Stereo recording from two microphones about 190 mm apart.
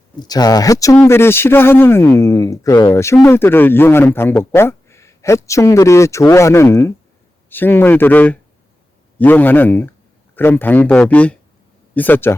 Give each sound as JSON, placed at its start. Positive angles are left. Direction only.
{"t": 0.2, "sound": "speech", "side_deg": 20}